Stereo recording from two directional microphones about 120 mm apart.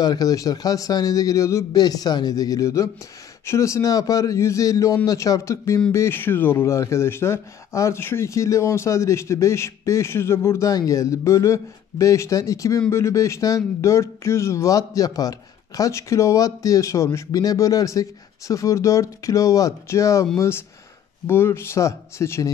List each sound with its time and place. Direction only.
0.0 s a man's voice: 30° left (ahead or behind)